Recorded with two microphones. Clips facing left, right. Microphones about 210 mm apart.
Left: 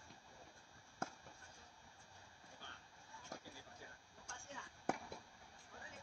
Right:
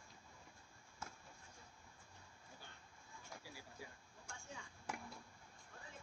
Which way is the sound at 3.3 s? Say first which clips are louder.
Left 4 dB; 45° left (ahead or behind).